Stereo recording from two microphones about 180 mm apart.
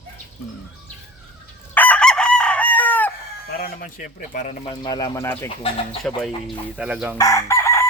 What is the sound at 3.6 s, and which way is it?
Speech, 50° left (ahead or behind).